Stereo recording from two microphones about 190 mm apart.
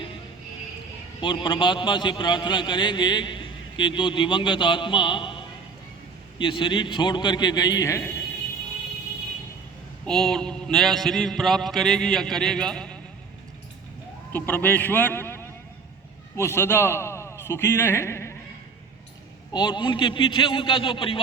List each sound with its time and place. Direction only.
1.2 s a man's voice: 25° left (ahead or behind)
6.4 s a man's voice: 25° left (ahead or behind)
10.1 s a man's voice: centre (ahead or behind)
14.3 s a man's voice: 10° left (ahead or behind)
19.5 s a man's voice: 20° left (ahead or behind)